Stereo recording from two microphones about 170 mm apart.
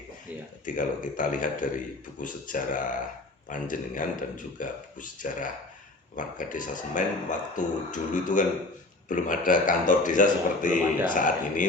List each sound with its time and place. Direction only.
0.6 s a man's voice: 50° left (ahead or behind)